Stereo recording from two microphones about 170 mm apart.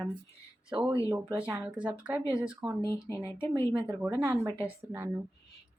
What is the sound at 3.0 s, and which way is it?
Speech, 15° left (ahead or behind).